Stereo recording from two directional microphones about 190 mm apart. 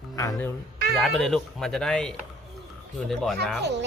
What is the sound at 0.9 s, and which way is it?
Speech, centre (ahead or behind).